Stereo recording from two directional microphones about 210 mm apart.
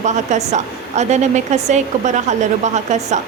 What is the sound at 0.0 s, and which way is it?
A woman's voice, 35° right (ahead or behind).